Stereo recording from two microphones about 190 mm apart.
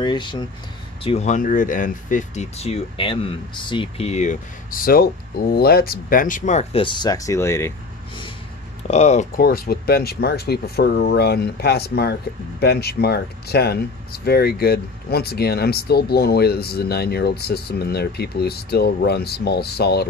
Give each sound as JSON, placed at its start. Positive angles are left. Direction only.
{"t": 0.0, "sound": "speech", "side_deg": 25}
{"t": 1.0, "sound": "speech", "side_deg": 35}
{"t": 8.8, "sound": "speech", "side_deg": 35}
{"t": 9.4, "sound": "speech", "side_deg": 55}